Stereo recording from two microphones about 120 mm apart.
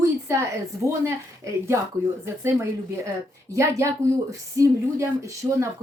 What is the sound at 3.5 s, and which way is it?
Speech, 25° right (ahead or behind).